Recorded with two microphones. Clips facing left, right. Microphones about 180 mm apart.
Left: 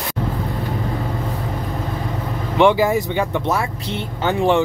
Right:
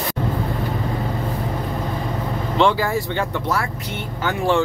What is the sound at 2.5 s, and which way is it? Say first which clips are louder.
Speech: left 4 dB; 15° left (ahead or behind).